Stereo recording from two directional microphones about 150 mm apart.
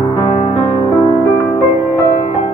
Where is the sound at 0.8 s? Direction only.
20° left (ahead or behind).